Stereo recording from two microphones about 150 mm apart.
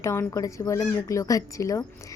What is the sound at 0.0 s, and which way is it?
Speech, 20° left (ahead or behind).